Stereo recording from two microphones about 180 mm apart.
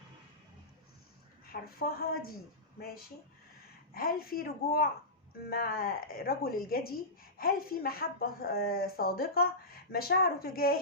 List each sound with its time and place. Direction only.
1.8 s speech: 55° left (ahead or behind)